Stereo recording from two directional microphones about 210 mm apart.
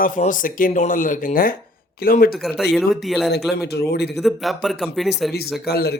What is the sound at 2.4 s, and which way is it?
Speech, centre (ahead or behind).